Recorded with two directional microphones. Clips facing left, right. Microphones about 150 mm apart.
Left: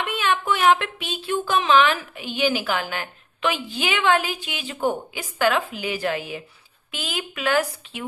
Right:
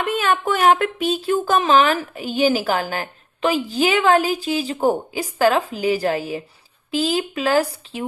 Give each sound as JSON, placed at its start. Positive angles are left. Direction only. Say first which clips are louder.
{"t": 0.0, "sound": "speech", "louder": "right 4 dB", "side_deg": -45}